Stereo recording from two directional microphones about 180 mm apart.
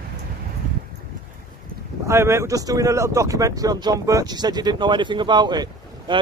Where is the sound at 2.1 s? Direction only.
15° right (ahead or behind).